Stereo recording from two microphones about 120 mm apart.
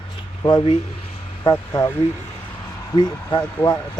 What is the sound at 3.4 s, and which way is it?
Speech, 15° left (ahead or behind).